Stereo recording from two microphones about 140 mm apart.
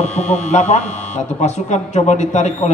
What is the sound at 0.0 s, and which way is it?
A man's voice, 55° left (ahead or behind).